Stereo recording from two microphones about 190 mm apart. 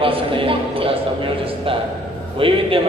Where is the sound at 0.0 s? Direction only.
30° right (ahead or behind).